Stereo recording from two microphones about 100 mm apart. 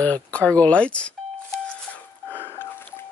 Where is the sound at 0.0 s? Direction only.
15° left (ahead or behind).